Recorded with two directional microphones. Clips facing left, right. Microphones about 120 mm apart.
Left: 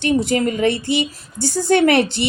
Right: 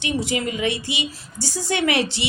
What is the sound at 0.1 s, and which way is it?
A woman's voice, 50° left (ahead or behind).